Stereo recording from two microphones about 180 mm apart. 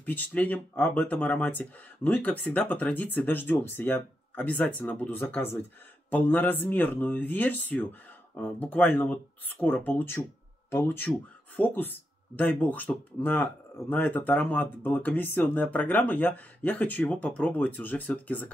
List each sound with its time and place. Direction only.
0.0 s speech: 10° left (ahead or behind)